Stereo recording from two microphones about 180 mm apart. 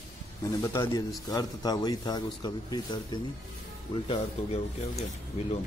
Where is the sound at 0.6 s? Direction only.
20° left (ahead or behind).